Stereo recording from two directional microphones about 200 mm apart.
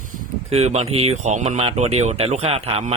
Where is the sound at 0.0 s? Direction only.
35° right (ahead or behind).